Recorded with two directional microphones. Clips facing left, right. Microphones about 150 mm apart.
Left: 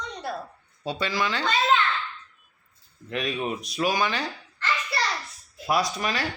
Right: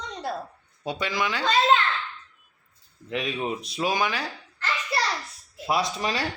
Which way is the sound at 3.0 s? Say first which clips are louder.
Even; 20° right (ahead or behind).